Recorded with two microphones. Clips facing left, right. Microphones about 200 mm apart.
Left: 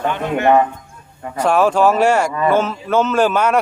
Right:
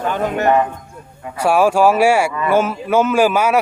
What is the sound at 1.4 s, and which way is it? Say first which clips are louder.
A man's voice: right 1 dB; 10° right (ahead or behind).